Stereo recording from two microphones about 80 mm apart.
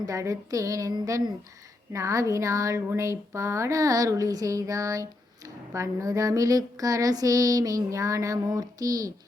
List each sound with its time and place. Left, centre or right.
0.0 s speech: right